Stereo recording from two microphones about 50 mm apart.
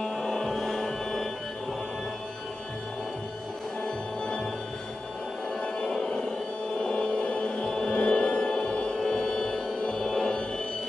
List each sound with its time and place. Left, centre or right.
0.0 s music: centre
4.2 s music: centre
5.6 s music: centre
6.8 s a sound: centre
7.6 s music: centre